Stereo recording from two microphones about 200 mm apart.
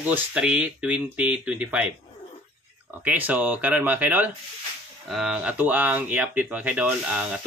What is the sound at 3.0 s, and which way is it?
Speech, 5° right (ahead or behind).